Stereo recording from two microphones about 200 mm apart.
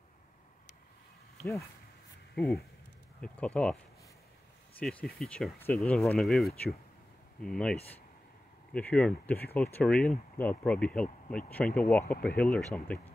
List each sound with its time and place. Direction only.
2.3 s speech: centre (ahead or behind)
4.7 s speech: centre (ahead or behind)
8.7 s speech: 5° left (ahead or behind)